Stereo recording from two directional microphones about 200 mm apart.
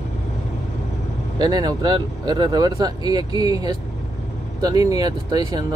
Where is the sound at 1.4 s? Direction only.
20° right (ahead or behind).